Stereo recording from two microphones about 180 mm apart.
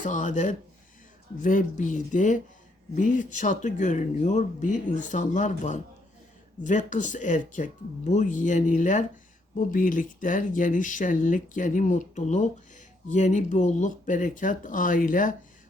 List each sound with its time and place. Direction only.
0.0 s speech: 45° left (ahead or behind)